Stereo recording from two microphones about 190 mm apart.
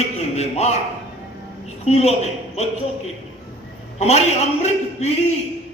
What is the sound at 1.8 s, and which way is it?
Speech, 35° left (ahead or behind).